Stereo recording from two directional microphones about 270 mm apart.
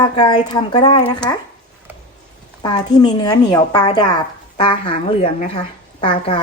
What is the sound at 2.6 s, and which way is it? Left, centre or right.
Speech, centre.